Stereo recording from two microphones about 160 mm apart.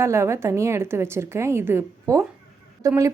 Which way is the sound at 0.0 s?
15° right (ahead or behind).